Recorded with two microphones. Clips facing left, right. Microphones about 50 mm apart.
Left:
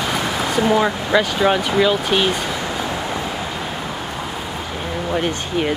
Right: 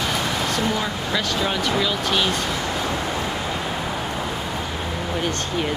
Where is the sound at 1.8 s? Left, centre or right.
Centre.